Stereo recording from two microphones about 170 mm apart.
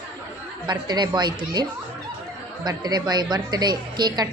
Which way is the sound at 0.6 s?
25° right (ahead or behind).